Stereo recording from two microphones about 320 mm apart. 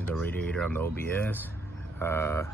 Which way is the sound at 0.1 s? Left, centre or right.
Centre.